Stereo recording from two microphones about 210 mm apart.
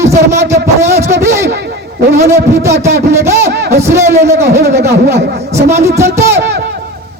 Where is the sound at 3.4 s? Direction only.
50° right (ahead or behind).